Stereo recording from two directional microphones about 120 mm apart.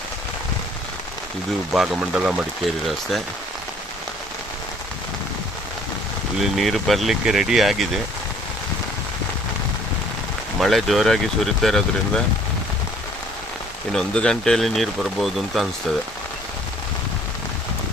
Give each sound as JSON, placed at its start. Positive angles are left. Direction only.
{"t": 1.7, "sound": "speech", "side_deg": -5}
{"t": 6.4, "sound": "speech", "side_deg": 0}
{"t": 10.6, "sound": "speech", "side_deg": 0}
{"t": 13.9, "sound": "speech", "side_deg": 5}